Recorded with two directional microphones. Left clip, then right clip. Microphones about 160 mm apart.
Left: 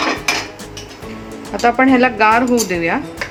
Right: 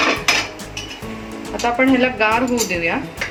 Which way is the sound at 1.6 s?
60° left (ahead or behind).